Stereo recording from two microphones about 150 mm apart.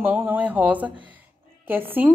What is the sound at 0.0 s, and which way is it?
A woman's voice, 10° right (ahead or behind).